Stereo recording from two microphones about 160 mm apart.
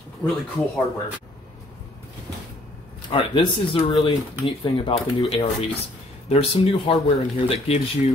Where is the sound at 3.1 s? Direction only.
30° left (ahead or behind).